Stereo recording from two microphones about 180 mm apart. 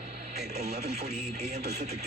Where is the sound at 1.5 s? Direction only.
65° right (ahead or behind).